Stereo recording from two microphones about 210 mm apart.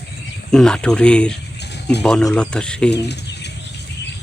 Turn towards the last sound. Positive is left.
turn(degrees=55)  # may be behind; listen again after turning